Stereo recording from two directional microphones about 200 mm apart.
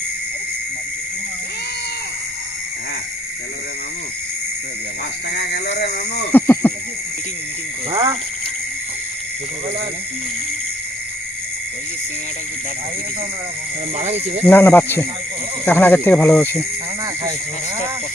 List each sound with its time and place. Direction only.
5.3 s speech: 55° left (ahead or behind)
6.3 s speech: 10° left (ahead or behind)
7.9 s speech: 30° right (ahead or behind)
14.0 s speech: 30° right (ahead or behind)
14.4 s speech: 10° left (ahead or behind)